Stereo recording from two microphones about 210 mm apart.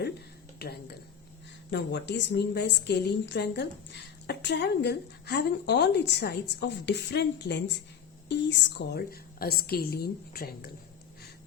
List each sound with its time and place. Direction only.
0.6 s a woman's voice: 50° left (ahead or behind)